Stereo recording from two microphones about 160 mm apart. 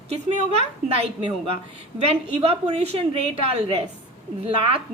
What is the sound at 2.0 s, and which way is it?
A woman's voice, 40° right (ahead or behind).